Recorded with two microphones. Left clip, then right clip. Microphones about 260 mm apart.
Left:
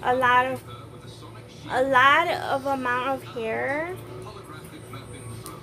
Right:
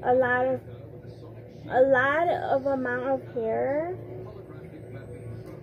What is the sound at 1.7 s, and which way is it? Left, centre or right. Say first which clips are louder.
A woman's voice: left 3 dB; centre.